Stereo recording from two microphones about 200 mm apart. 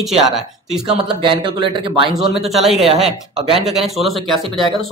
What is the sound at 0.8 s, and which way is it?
Speech, 25° right (ahead or behind).